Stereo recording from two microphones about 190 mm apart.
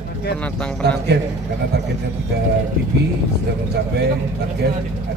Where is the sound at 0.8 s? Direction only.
60° right (ahead or behind).